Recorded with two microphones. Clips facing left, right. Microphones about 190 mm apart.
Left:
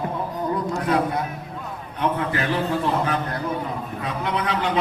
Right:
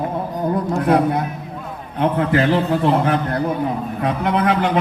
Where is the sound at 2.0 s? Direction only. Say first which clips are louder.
Right 6 dB; 60° right (ahead or behind).